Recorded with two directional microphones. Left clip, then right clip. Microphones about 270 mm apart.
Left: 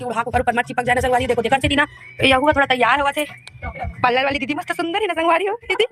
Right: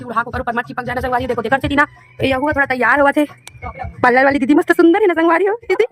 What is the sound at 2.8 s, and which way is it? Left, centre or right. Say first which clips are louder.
Speech: right 5 dB; right.